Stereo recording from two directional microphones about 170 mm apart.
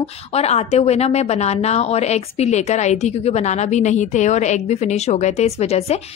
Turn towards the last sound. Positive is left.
turn(degrees=40)  # may be behind; listen again after turning